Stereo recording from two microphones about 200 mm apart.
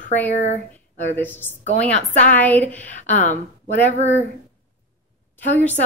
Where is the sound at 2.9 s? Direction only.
35° left (ahead or behind).